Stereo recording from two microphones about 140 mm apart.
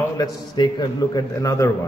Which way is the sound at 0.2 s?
30° left (ahead or behind).